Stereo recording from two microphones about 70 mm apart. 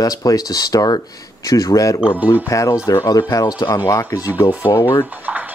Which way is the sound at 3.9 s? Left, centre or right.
Left.